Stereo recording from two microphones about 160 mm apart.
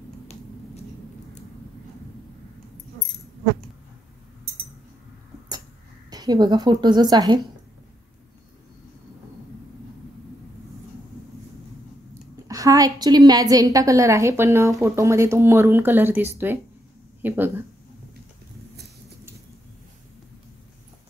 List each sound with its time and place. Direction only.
6.0 s a woman's voice: 25° right (ahead or behind)
12.1 s a woman's voice: 20° right (ahead or behind)